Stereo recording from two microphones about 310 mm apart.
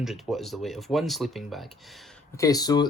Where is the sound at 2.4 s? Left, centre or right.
Centre.